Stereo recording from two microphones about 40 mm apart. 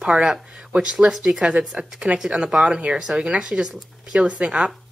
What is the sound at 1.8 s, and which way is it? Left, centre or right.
A woman's voice, centre.